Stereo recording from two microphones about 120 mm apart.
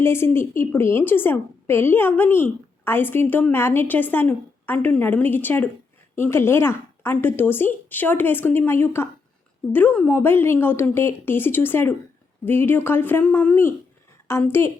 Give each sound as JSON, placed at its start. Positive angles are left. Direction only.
{"t": 0.0, "sound": "a woman's voice", "side_deg": 20}
{"t": 14.3, "sound": "a woman's voice", "side_deg": 20}